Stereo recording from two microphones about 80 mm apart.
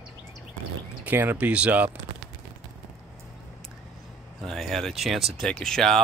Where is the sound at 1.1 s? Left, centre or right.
Right.